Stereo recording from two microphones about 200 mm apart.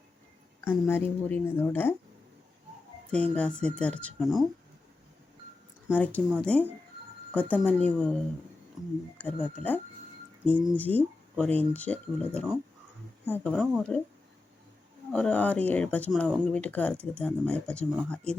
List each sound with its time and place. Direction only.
0.7 s speech: 10° left (ahead or behind)
3.1 s speech: 5° left (ahead or behind)
5.9 s speech: 5° left (ahead or behind)
8.8 s speech: 20° right (ahead or behind)
9.1 s speech: 10° left (ahead or behind)
15.1 s speech: 5° left (ahead or behind)